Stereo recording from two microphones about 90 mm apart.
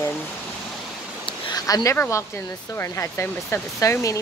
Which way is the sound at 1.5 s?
40° left (ahead or behind).